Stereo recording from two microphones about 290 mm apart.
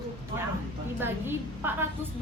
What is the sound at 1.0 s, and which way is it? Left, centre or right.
A woman's voice, centre.